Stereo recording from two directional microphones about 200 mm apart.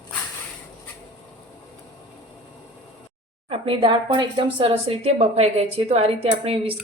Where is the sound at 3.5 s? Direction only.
25° right (ahead or behind).